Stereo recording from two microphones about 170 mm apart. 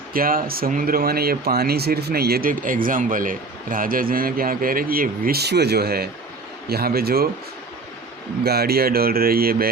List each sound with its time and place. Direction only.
0.1 s speech: 55° right (ahead or behind)
8.4 s speech: 65° right (ahead or behind)